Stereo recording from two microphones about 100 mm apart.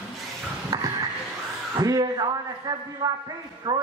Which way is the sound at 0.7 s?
40° right (ahead or behind).